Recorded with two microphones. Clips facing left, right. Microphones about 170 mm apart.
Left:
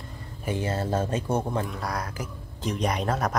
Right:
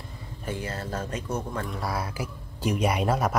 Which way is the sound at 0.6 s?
25° left (ahead or behind).